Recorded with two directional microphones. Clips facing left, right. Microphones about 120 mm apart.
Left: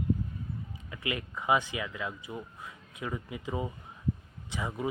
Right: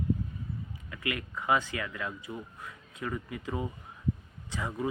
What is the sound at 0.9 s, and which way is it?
Speech, 25° left (ahead or behind).